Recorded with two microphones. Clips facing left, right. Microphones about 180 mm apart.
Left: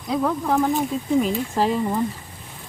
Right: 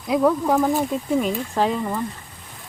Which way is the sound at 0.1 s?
5° right (ahead or behind).